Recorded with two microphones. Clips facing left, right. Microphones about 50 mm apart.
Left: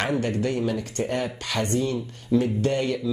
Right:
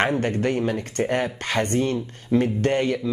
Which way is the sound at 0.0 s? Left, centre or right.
Right.